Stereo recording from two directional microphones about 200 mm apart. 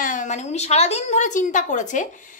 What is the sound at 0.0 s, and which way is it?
A woman's voice, 40° left (ahead or behind).